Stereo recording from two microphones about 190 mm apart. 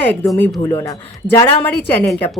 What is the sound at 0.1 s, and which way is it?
A man's voice, 10° left (ahead or behind).